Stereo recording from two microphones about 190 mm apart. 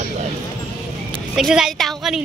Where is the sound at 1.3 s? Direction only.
5° right (ahead or behind).